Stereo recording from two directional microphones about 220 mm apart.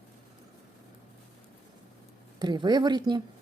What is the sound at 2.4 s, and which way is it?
Speech, 20° right (ahead or behind).